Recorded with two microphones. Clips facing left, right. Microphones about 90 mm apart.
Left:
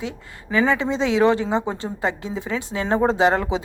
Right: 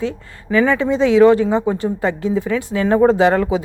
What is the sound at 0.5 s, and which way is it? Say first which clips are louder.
A woman's voice: right 4 dB; 20° left (ahead or behind).